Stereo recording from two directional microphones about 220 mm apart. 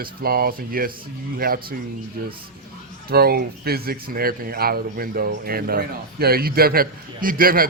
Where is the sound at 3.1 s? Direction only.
45° right (ahead or behind).